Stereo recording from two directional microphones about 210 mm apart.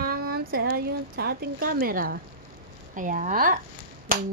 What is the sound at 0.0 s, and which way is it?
Speech, 45° right (ahead or behind).